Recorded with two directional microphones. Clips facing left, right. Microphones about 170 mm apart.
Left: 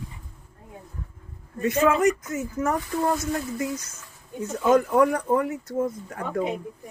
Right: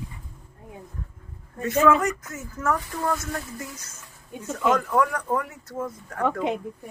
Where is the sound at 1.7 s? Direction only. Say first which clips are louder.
Even; 20° left (ahead or behind).